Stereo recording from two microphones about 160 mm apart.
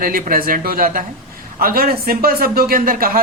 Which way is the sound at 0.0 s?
65° right (ahead or behind).